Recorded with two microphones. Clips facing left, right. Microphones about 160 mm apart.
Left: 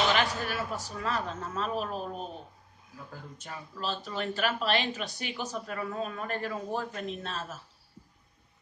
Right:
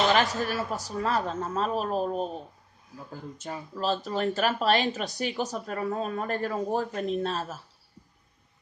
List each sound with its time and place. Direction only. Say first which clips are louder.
0.1 s speech: right 4 dB; 40° right (ahead or behind)
3.7 s speech: right 6 dB; 40° right (ahead or behind)